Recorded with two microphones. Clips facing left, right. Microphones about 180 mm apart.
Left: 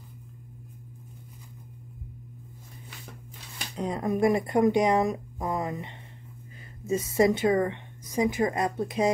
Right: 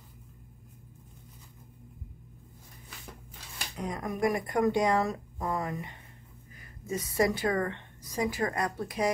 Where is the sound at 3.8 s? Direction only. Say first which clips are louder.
Left 6 dB; 30° left (ahead or behind).